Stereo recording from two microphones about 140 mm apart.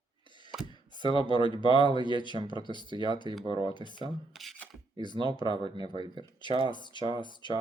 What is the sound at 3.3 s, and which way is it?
Speech, 35° right (ahead or behind).